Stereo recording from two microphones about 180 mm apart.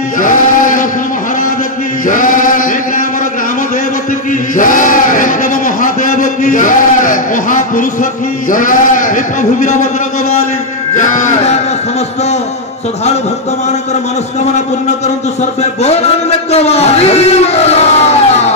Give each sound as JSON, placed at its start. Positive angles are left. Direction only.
{"t": 0.2, "sound": "a sound", "side_deg": 45}
{"t": 2.0, "sound": "chant", "side_deg": 45}
{"t": 4.6, "sound": "a man's voice", "side_deg": 45}
{"t": 11.0, "sound": "music", "side_deg": 45}
{"t": 15.6, "sound": "a man's voice", "side_deg": 35}